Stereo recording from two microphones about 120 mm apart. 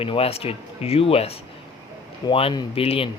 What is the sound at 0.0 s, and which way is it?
Speech, 50° left (ahead or behind).